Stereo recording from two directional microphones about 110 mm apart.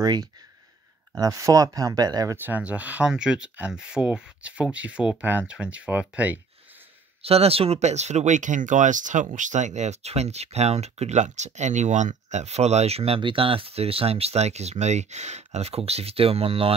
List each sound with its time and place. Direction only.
0.0 s speech: 35° right (ahead or behind)
2.3 s speech: 15° right (ahead or behind)
7.2 s speech: 65° right (ahead or behind)